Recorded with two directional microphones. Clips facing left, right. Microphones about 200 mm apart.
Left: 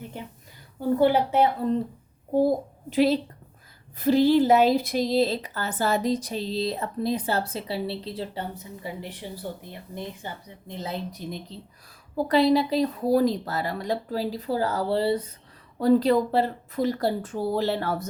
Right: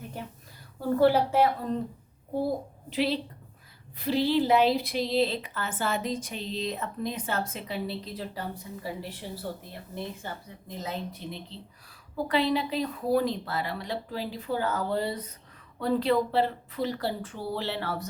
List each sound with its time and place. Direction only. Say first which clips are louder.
0.8 s a woman's voice: left 1 dB; 15° left (ahead or behind)
2.4 s a woman's voice: left 7 dB; 45° left (ahead or behind); by 10.3 s 15° left (ahead or behind)
10.7 s a woman's voice: left 3 dB; 30° left (ahead or behind)
15.8 s speech: left 5 dB; 40° left (ahead or behind)